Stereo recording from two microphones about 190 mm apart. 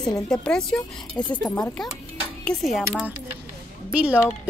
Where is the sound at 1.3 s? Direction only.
20° left (ahead or behind).